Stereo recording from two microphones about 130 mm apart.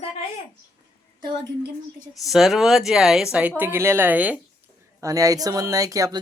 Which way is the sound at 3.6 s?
20° right (ahead or behind).